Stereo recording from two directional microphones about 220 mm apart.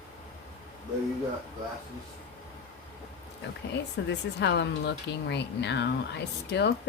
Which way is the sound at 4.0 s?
50° left (ahead or behind).